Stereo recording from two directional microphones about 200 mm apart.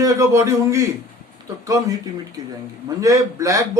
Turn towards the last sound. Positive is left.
turn(degrees=-15)  # may be behind; listen again after turning